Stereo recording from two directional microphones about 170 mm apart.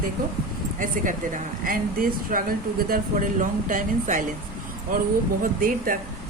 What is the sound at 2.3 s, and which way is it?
A man's voice, 55° right (ahead or behind).